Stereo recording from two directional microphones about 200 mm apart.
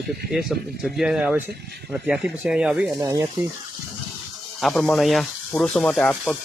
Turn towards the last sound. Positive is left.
turn(degrees=5)  # may be behind; listen again after turning